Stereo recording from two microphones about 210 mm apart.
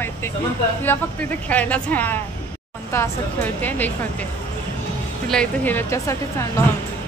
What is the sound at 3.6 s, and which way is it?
Speech, 10° left (ahead or behind).